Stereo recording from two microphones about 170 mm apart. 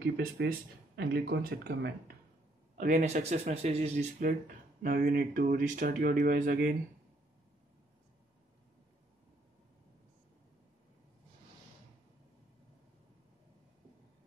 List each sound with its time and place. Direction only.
0.0 s speech: 65° right (ahead or behind)
2.7 s speech: 50° right (ahead or behind)
4.8 s speech: 60° right (ahead or behind)